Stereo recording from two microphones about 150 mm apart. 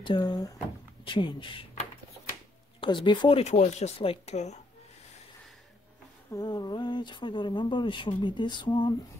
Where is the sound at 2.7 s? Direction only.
35° left (ahead or behind).